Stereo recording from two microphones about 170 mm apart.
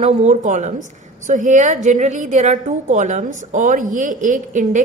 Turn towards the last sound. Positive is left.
turn(degrees=-50)  # may be behind; listen again after turning